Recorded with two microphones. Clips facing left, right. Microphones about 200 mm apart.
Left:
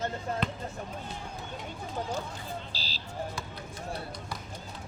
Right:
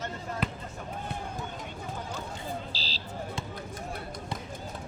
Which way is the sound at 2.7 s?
45° left (ahead or behind).